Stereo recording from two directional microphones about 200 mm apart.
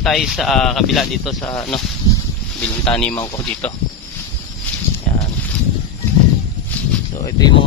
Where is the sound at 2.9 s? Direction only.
5° left (ahead or behind).